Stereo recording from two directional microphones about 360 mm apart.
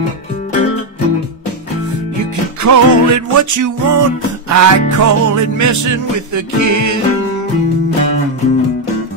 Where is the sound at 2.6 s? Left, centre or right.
Right.